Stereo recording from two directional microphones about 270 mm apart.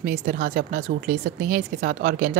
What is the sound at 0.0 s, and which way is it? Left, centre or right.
Speech, right.